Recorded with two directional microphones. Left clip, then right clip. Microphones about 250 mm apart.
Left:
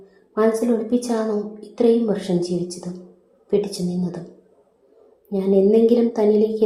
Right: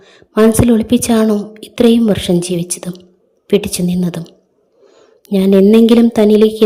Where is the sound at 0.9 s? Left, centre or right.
Right.